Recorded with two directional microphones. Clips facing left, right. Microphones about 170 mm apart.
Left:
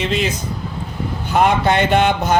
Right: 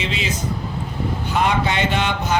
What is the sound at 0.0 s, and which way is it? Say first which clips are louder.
Speech: left 6 dB; 50° left (ahead or behind).